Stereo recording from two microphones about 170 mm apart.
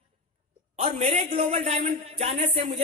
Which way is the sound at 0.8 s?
40° right (ahead or behind).